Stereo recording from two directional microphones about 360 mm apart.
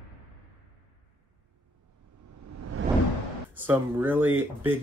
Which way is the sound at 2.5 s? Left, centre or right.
Right.